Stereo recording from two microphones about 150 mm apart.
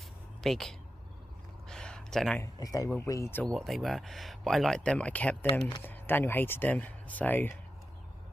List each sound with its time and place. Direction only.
0.4 s speech: centre (ahead or behind)
1.7 s a sound: 5° left (ahead or behind)
2.4 s speech: 25° left (ahead or behind)
3.5 s speech: centre (ahead or behind)